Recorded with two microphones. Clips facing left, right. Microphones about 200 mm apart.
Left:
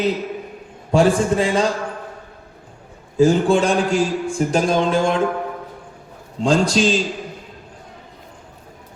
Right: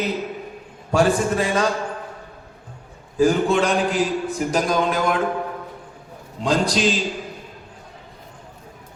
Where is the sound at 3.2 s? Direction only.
30° left (ahead or behind).